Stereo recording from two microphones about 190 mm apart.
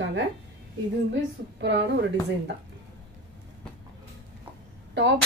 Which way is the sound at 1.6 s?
65° right (ahead or behind).